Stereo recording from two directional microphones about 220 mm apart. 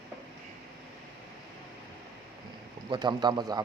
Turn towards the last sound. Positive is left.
turn(degrees=-20)  # may be behind; listen again after turning